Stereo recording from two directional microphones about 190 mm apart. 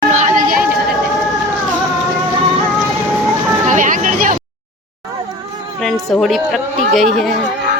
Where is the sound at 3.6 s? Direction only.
40° right (ahead or behind).